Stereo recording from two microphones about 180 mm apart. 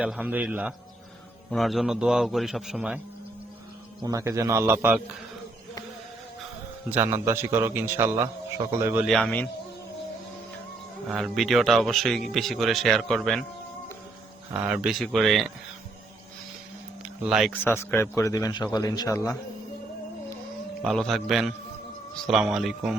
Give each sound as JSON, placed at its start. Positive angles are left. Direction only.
{"t": 0.0, "sound": "a man's voice", "side_deg": -10}
{"t": 4.0, "sound": "a man's voice", "side_deg": -20}
{"t": 6.9, "sound": "a man's voice", "side_deg": -15}
{"t": 9.0, "sound": "speech", "side_deg": 0}
{"t": 11.1, "sound": "speech", "side_deg": 0}
{"t": 14.5, "sound": "speech", "side_deg": -5}
{"t": 17.2, "sound": "speech", "side_deg": 0}
{"t": 17.5, "sound": "a man's voice", "side_deg": 10}
{"t": 20.8, "sound": "speech", "side_deg": 0}